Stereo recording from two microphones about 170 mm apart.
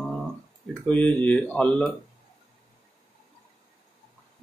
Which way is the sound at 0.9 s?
10° left (ahead or behind).